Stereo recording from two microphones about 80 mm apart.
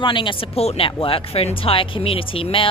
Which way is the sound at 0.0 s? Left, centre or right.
Left.